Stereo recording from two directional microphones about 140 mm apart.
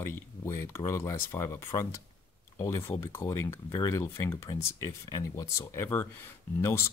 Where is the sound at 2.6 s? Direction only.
15° left (ahead or behind).